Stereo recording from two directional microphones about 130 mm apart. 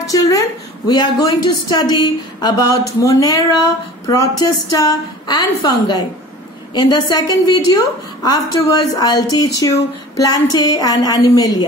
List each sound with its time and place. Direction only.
0.0 s a woman's voice: 25° left (ahead or behind)